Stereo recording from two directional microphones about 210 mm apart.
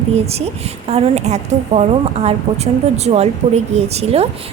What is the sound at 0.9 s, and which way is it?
A woman's voice, 30° right (ahead or behind).